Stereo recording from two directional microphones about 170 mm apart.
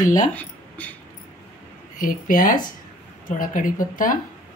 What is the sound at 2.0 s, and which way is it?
Speech, 55° left (ahead or behind).